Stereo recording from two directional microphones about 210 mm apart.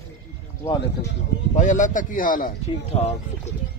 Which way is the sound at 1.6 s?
35° left (ahead or behind).